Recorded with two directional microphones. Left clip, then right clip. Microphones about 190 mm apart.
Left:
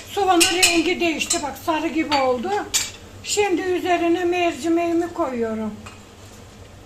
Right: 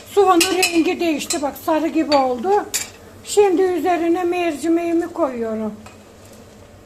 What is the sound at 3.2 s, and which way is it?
A woman's voice, 35° right (ahead or behind).